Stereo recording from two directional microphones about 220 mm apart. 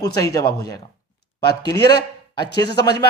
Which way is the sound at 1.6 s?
20° left (ahead or behind).